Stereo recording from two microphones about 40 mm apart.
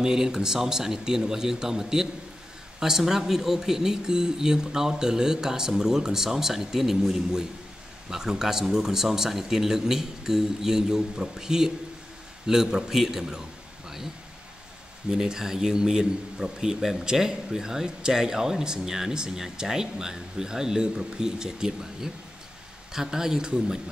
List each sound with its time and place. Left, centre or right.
0.0 s a man's voice: centre
15.0 s a man's voice: centre